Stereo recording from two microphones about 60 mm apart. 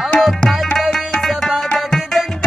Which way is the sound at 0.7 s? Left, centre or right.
Centre.